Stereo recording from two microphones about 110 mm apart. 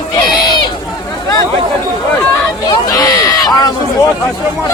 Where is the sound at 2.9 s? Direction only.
35° left (ahead or behind).